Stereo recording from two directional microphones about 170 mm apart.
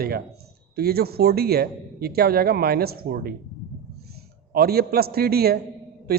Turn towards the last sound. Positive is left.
turn(degrees=-65)  # may be behind; listen again after turning